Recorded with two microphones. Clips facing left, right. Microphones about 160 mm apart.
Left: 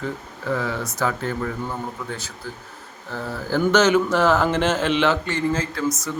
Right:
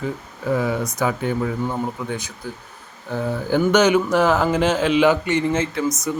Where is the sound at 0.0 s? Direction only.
15° right (ahead or behind).